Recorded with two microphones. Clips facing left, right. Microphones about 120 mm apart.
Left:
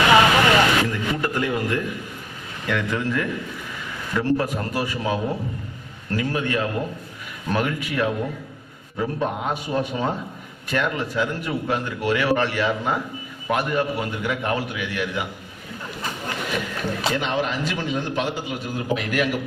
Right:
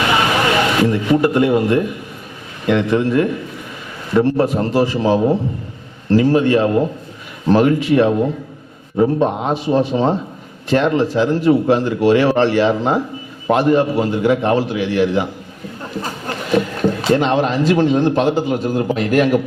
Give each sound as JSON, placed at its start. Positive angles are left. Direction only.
{"t": 0.8, "sound": "a man's voice", "side_deg": -25}